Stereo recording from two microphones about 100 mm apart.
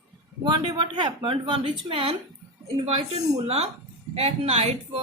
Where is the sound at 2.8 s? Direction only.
90° right.